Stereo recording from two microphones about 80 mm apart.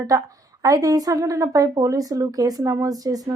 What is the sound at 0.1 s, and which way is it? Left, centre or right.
Speech, right.